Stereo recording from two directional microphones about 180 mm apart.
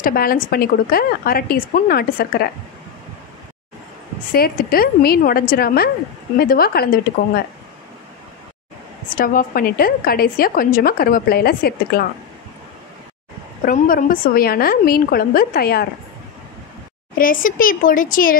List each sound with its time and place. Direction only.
0.0 s a woman's voice: 55° left (ahead or behind)
4.3 s a woman's voice: 55° left (ahead or behind)
9.1 s a woman's voice: 50° left (ahead or behind)
13.6 s a woman's voice: 50° left (ahead or behind)
17.2 s speech: 50° left (ahead or behind)